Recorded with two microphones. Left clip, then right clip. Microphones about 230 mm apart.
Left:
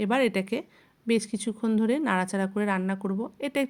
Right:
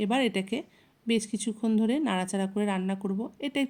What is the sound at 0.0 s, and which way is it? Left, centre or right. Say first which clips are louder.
Speech: left 3 dB; centre.